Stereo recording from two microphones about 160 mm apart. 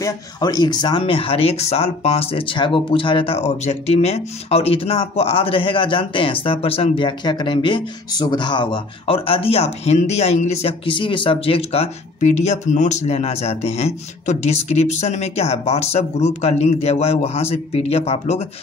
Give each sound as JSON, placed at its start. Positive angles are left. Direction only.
{"t": 0.0, "sound": "speech", "side_deg": 25}